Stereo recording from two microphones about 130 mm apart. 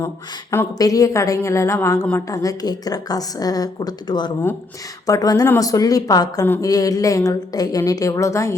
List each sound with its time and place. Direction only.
0.5 s a woman's voice: 25° left (ahead or behind)